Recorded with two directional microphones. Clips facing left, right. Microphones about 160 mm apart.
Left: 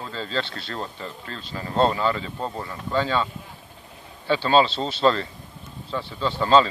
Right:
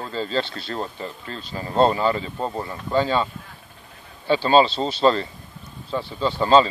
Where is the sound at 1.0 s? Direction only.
40° right (ahead or behind).